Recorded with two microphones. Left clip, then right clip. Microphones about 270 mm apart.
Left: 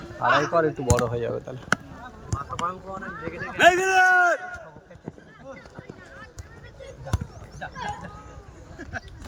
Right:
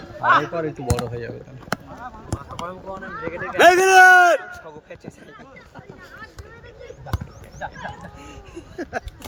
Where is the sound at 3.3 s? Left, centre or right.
Centre.